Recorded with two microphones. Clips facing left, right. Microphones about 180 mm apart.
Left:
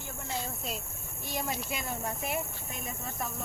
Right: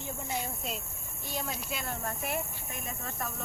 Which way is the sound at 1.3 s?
10° left (ahead or behind).